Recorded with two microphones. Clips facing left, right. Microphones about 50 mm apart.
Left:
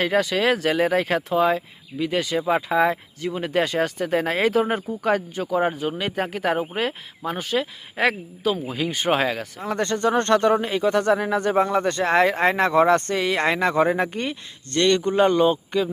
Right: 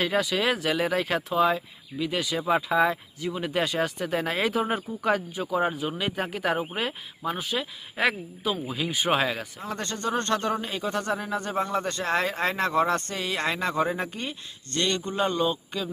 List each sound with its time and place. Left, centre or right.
0.0 s speech: left
6.0 s speech: left
7.3 s speech: left
9.1 s speech: left
11.5 s speech: left